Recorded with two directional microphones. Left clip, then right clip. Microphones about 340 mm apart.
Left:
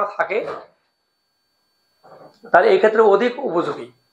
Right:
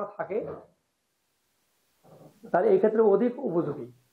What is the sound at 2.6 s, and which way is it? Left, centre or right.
Speech, centre.